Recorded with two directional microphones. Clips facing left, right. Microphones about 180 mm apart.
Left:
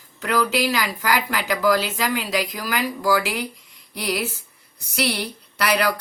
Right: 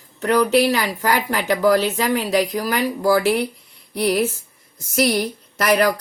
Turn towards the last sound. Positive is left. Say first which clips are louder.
# right 4 dB
turn(degrees=-40)  # may be behind; listen again after turning